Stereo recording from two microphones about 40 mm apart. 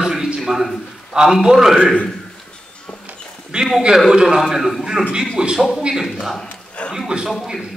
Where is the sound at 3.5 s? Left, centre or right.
Right.